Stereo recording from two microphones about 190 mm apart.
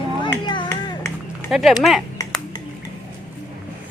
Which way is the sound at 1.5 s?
Centre (ahead or behind).